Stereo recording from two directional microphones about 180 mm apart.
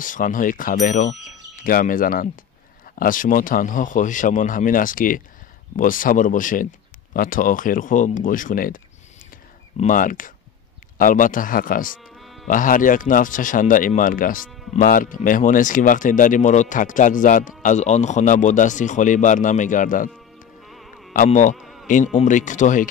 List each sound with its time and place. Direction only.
0.0 s speech: 45° left (ahead or behind)
9.8 s speech: 45° left (ahead or behind)
12.0 s music: centre (ahead or behind)
12.4 s speech: 50° left (ahead or behind)
20.6 s music: centre (ahead or behind)
21.1 s speech: 45° left (ahead or behind)
21.5 s insect: centre (ahead or behind)
21.8 s speech: 45° left (ahead or behind)